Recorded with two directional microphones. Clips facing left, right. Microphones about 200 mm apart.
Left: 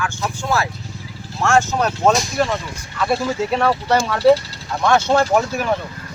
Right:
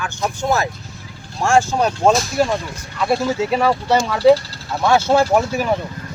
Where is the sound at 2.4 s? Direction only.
Centre (ahead or behind).